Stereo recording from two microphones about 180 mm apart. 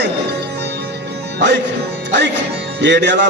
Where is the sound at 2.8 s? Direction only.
75° right (ahead or behind).